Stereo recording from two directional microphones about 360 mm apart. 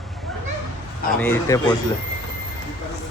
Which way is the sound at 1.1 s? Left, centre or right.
Centre.